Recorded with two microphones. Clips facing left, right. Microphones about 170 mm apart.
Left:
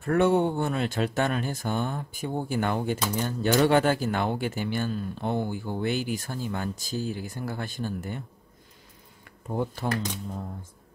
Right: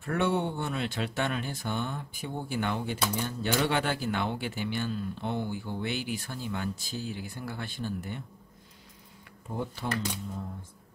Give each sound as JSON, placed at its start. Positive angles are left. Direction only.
{"t": 0.0, "sound": "speech", "side_deg": 45}
{"t": 9.8, "sound": "speech", "side_deg": 45}